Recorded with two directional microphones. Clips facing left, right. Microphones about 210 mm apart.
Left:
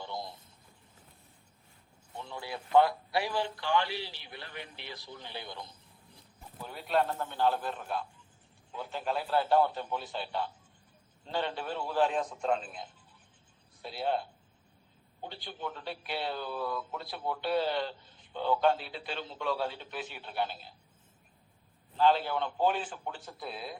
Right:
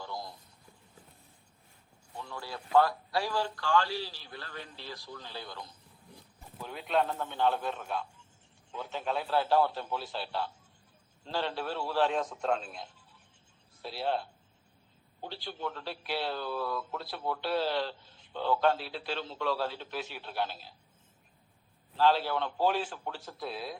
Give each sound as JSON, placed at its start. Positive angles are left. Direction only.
{"t": 0.0, "sound": "a sound", "side_deg": 25}
{"t": 2.1, "sound": "speech", "side_deg": 20}
{"t": 6.6, "sound": "a man's voice", "side_deg": 5}
{"t": 15.3, "sound": "a man's voice", "side_deg": 0}
{"t": 21.9, "sound": "a man's voice", "side_deg": 0}